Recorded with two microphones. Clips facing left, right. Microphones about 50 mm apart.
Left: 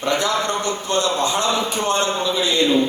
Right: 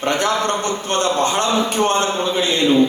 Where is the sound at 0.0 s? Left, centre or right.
Right.